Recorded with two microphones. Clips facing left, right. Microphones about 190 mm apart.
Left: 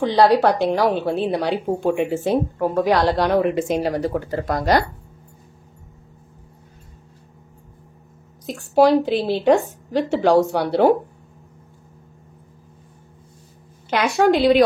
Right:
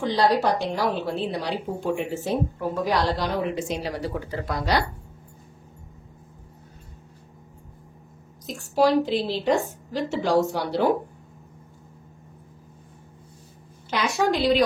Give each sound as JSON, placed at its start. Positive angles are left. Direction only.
{"t": 0.0, "sound": "a woman's voice", "side_deg": 65}
{"t": 8.5, "sound": "a woman's voice", "side_deg": 65}
{"t": 13.8, "sound": "a woman's voice", "side_deg": 60}